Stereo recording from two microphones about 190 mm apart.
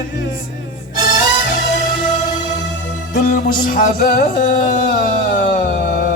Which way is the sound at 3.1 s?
45° left (ahead or behind).